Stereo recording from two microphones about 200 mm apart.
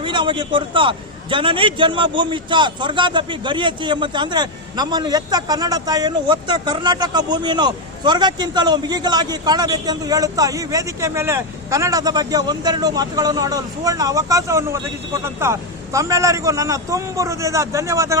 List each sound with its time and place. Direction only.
0.0 s a man's voice: 25° right (ahead or behind)